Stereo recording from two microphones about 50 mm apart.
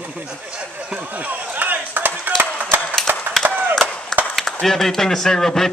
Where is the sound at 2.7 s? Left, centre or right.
Right.